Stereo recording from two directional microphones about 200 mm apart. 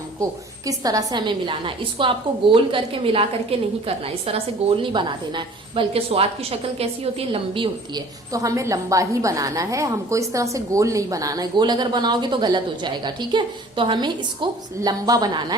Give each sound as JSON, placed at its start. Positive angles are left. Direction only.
{"t": 0.2, "sound": "a woman's voice", "side_deg": -15}